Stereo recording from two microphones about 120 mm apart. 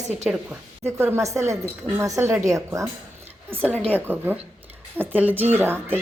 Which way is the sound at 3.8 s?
15° right (ahead or behind).